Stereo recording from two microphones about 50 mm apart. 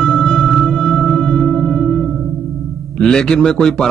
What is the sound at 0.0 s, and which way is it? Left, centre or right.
Music, centre.